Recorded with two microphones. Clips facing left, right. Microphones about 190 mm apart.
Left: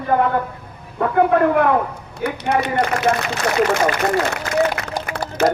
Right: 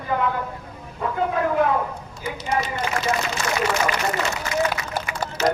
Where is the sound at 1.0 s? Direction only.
65° left (ahead or behind).